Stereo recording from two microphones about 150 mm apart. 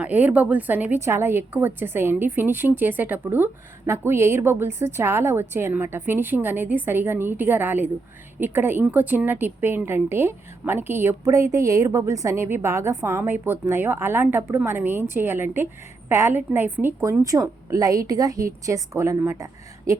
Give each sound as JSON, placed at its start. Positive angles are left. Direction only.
{"t": 0.0, "sound": "a woman's voice", "side_deg": -10}